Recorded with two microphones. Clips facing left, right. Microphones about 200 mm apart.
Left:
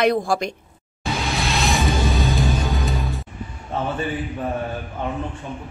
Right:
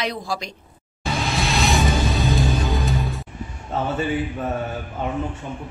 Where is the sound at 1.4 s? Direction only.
Centre (ahead or behind).